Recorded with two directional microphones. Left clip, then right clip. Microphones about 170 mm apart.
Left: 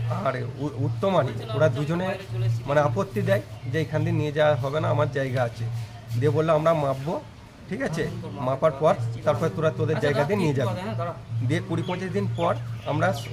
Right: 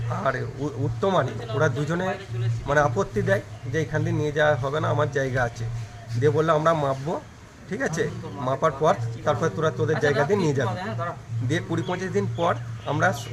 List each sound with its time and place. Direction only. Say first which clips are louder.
0.1 s a man's voice: right 2 dB; centre (ahead or behind)
10.4 s a man's voice: right 1 dB; 5° right (ahead or behind)
10.8 s speech: right 1 dB; 45° left (ahead or behind)
11.4 s a man's voice: right 1 dB; 5° right (ahead or behind)